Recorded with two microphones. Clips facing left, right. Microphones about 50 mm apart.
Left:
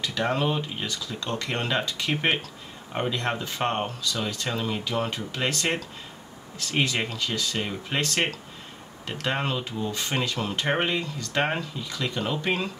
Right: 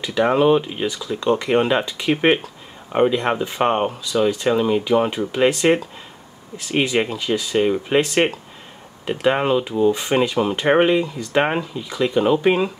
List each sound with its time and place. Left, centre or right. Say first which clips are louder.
0.0 s speech: right 9 dB; centre